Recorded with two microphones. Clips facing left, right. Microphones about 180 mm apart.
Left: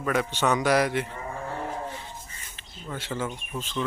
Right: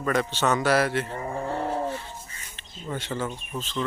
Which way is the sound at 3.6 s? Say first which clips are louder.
Right 1 dB; 10° left (ahead or behind).